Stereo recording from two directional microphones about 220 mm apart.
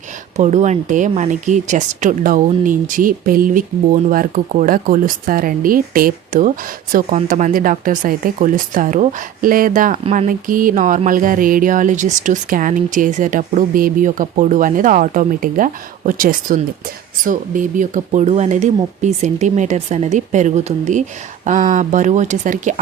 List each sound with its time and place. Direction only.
0.3 s speech: 30° right (ahead or behind)